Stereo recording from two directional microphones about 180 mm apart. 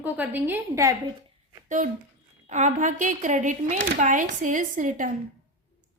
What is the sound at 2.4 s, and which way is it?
A woman's voice, 40° right (ahead or behind).